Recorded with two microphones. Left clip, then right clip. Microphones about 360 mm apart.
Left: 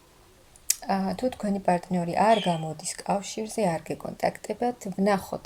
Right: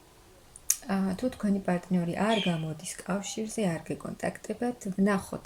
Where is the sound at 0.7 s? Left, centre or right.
Centre.